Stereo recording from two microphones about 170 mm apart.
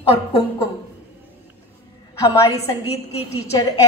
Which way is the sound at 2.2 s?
20° left (ahead or behind).